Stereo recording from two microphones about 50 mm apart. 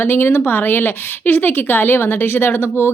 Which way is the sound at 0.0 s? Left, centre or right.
Left.